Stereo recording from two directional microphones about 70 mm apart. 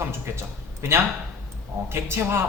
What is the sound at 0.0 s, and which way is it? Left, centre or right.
Speech, right.